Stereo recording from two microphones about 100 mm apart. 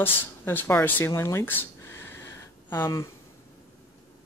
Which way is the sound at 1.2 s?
25° left (ahead or behind).